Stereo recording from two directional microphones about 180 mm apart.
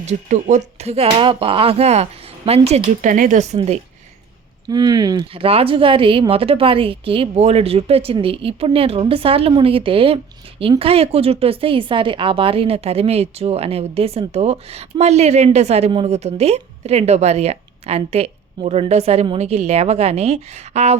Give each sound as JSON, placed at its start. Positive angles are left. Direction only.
{"t": 0.0, "sound": "a woman's voice", "side_deg": -40}
{"t": 4.7, "sound": "a woman's voice", "side_deg": -20}